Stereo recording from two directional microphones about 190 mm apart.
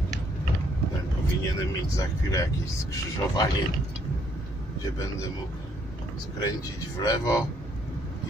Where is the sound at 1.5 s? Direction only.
15° left (ahead or behind).